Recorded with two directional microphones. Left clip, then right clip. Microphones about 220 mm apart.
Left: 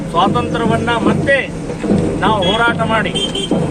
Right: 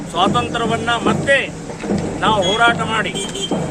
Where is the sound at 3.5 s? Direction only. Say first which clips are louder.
Left 3 dB; 30° right (ahead or behind).